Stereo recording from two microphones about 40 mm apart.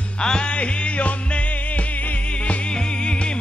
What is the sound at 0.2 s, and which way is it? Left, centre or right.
Music, left.